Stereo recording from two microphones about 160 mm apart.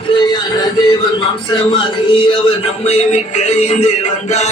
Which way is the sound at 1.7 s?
30° left (ahead or behind).